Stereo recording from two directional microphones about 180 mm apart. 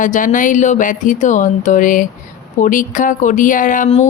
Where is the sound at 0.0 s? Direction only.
45° left (ahead or behind).